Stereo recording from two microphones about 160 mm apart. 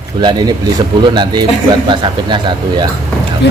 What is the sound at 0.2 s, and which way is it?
Speech, 25° right (ahead or behind).